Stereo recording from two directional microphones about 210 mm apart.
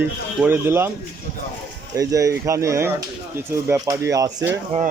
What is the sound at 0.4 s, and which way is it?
Speech, 10° right (ahead or behind).